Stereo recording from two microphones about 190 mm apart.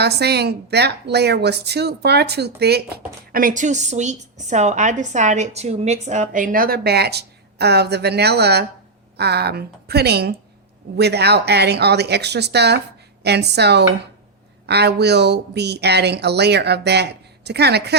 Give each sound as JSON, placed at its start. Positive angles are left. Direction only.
{"t": 0.0, "sound": "a woman's voice", "side_deg": -60}